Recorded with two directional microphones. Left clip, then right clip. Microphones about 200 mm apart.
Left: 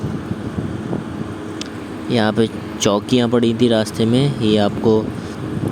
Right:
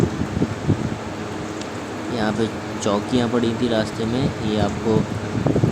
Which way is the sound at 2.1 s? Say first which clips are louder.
Left 6 dB; 40° left (ahead or behind).